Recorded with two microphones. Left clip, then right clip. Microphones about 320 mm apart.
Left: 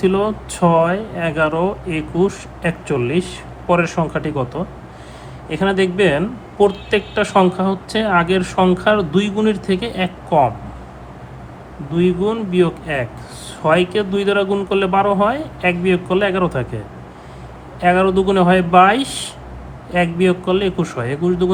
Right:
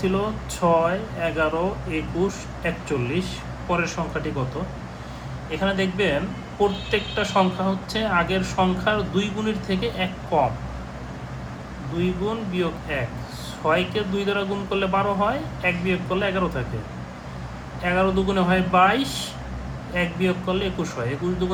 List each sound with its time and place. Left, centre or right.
0.0 s speech: left
5.5 s speech: left
12.3 s speech: left
17.7 s speech: left